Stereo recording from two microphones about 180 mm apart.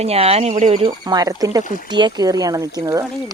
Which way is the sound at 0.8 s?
25° right (ahead or behind).